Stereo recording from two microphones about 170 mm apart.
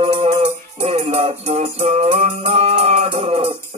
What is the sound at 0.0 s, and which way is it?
Music, 35° right (ahead or behind).